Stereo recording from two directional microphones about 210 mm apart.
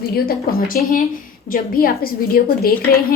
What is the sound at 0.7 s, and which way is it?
A woman's voice, 40° left (ahead or behind).